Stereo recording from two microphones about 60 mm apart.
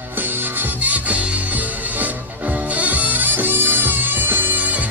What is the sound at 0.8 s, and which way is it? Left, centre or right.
Music, right.